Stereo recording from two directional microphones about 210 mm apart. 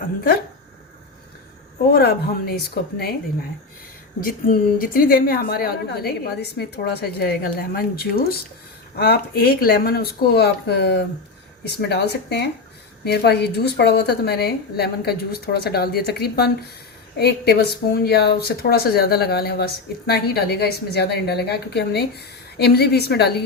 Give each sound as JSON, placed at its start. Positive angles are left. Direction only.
{"t": 1.9, "sound": "speech", "side_deg": 50}
{"t": 4.2, "sound": "speech", "side_deg": 40}